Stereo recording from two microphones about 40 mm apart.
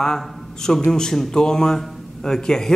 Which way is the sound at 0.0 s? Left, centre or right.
Centre.